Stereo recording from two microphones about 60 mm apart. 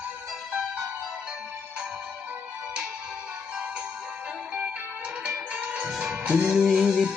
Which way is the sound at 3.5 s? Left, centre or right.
Centre.